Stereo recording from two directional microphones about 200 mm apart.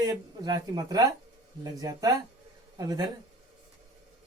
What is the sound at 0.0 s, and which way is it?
A woman's voice, 20° right (ahead or behind).